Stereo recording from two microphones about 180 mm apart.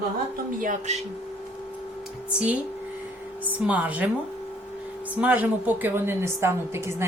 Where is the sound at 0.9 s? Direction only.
40° right (ahead or behind).